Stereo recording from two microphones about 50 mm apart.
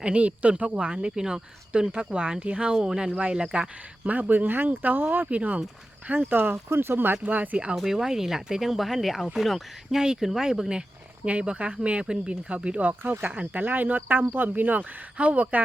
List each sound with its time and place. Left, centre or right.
0.0 s speech: right
4.1 s speech: right
6.3 s speech: right
7.8 s speech: centre
11.3 s speech: right
12.9 s speech: right
13.3 s speech: right
13.6 s speech: right